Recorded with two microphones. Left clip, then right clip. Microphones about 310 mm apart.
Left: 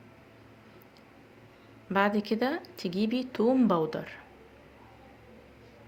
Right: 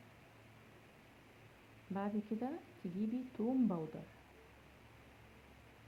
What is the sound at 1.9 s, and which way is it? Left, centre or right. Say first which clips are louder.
A woman's voice: left 16 dB; centre.